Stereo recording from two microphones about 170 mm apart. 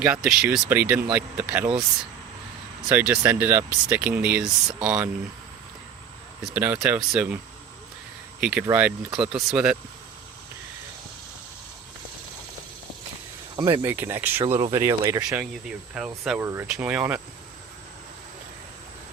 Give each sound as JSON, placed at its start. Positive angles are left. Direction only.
{"t": 0.0, "sound": "speech", "side_deg": -10}
{"t": 2.9, "sound": "speech", "side_deg": -10}
{"t": 6.4, "sound": "speech", "side_deg": -10}
{"t": 8.4, "sound": "speech", "side_deg": -5}
{"t": 13.6, "sound": "speech", "side_deg": -30}
{"t": 13.8, "sound": "speech", "side_deg": -10}
{"t": 16.0, "sound": "speech", "side_deg": -5}
{"t": 16.4, "sound": "speech", "side_deg": -15}